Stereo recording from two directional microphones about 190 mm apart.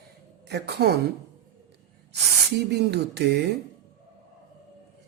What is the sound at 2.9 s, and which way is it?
Speech, 60° right (ahead or behind).